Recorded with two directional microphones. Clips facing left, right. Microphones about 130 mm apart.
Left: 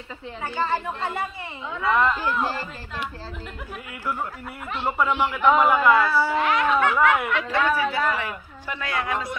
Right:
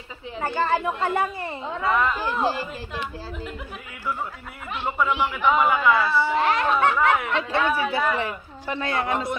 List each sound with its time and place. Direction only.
0.4 s a woman's voice: 45° right (ahead or behind)
1.6 s speech: 35° right (ahead or behind)
1.9 s speech: 5° right (ahead or behind)
4.7 s speech: centre (ahead or behind)
6.3 s speech: 35° right (ahead or behind)